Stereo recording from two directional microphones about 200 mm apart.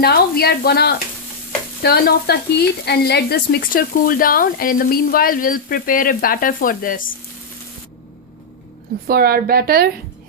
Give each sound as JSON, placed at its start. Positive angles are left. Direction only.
{"t": 0.0, "sound": "speech", "side_deg": 50}
{"t": 9.0, "sound": "a woman's voice", "side_deg": -50}